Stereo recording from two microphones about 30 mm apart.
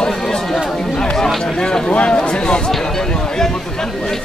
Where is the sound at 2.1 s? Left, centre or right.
Left.